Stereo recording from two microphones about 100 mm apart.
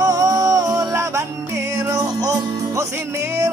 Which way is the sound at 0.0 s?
35° right (ahead or behind).